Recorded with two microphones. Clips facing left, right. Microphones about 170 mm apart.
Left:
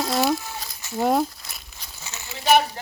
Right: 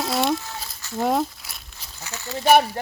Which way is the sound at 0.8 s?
15° left (ahead or behind).